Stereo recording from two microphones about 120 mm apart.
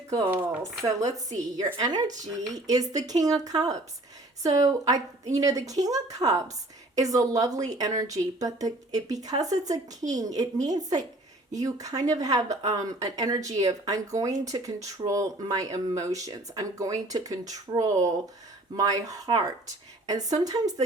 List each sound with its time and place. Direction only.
0.3 s speech: 15° right (ahead or behind)
0.6 s a woman's voice: 25° right (ahead or behind)